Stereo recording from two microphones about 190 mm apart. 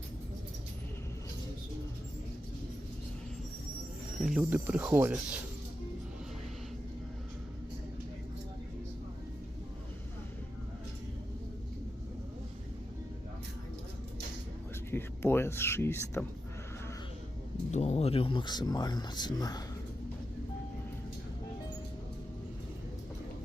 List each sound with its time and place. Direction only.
4.2 s speech: 5° right (ahead or behind)
14.8 s a sound: 10° left (ahead or behind)
17.7 s speech: 35° left (ahead or behind); by 19.6 s 20° left (ahead or behind)